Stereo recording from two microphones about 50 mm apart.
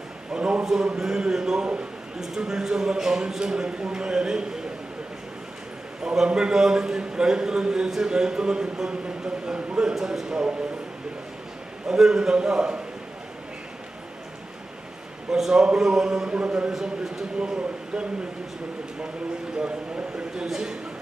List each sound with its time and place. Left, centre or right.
0.3 s a sound: centre
0.6 s a man's voice: centre
6.0 s a man's voice: centre
11.9 s a man's voice: centre
15.3 s a man's voice: centre
17.9 s a man's voice: centre
20.1 s a man's voice: centre